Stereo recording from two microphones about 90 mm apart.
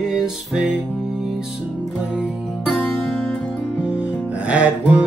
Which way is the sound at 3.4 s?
15° left (ahead or behind).